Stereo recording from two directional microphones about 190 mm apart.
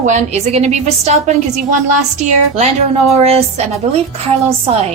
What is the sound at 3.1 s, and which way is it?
Speech, 35° right (ahead or behind).